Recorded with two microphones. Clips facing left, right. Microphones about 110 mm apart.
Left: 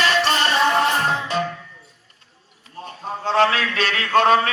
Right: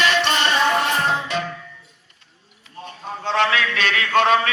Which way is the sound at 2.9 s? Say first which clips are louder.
Left 2 dB; 35° left (ahead or behind).